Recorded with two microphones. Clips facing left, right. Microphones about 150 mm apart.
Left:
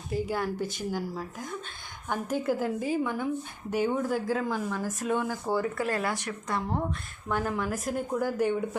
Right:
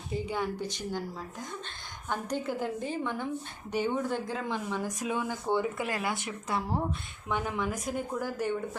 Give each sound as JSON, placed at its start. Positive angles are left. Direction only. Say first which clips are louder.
{"t": 0.1, "sound": "a woman's voice", "louder": "left 2 dB", "side_deg": 5}